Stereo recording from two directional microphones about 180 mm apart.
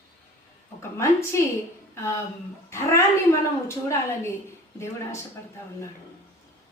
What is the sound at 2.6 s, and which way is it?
Speech, 15° left (ahead or behind).